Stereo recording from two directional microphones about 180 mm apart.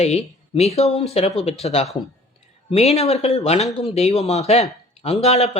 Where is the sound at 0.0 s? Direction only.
35° left (ahead or behind).